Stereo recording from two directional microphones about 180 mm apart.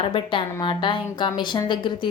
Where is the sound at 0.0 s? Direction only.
30° left (ahead or behind).